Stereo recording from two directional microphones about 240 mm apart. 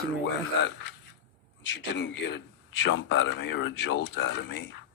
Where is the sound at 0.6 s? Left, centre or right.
Left.